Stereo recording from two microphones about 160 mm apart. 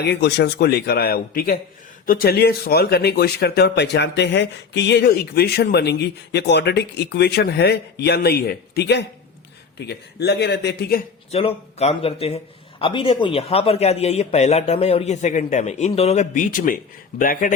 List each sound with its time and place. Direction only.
0.0 s speech: 90° left
11.3 s speech: 40° left (ahead or behind); by 17.5 s 60° left (ahead or behind)